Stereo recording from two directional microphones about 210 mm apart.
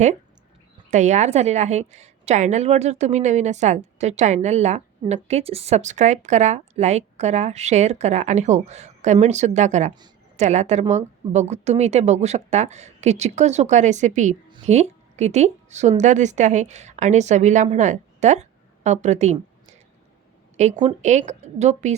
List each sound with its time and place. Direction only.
0.9 s a woman's voice: 35° right (ahead or behind)
20.6 s a woman's voice: 35° right (ahead or behind)